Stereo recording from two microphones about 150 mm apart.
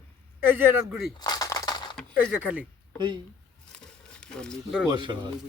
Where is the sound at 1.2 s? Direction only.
25° left (ahead or behind).